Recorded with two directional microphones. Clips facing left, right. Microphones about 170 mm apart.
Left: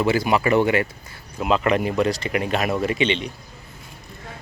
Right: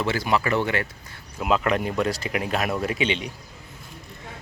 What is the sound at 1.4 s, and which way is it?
Speech, centre (ahead or behind).